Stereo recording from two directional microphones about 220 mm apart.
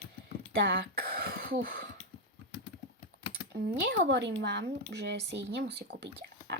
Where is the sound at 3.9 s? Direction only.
50° right (ahead or behind).